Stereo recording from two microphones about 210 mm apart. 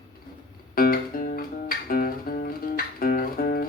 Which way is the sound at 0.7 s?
45° left (ahead or behind).